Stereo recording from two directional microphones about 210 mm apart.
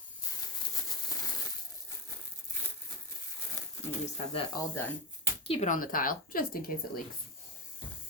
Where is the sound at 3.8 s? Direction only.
30° left (ahead or behind); by 6.7 s 45° left (ahead or behind).